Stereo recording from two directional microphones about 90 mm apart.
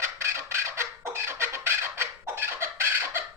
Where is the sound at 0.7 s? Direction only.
30° right (ahead or behind).